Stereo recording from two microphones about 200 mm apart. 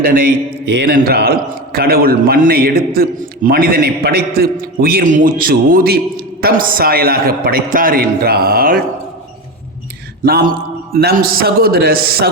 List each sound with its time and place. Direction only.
0.6 s a man's voice: 60° right (ahead or behind)
10.2 s a man's voice: 50° right (ahead or behind)